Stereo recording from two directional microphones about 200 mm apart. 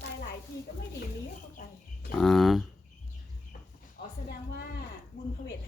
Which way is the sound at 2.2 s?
Centre (ahead or behind).